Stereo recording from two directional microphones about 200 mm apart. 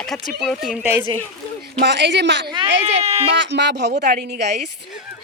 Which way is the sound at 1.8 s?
60° right (ahead or behind).